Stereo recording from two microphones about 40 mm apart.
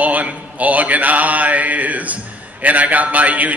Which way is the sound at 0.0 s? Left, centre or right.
Right.